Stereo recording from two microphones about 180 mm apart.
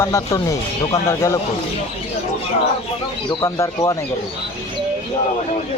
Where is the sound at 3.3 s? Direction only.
20° left (ahead or behind).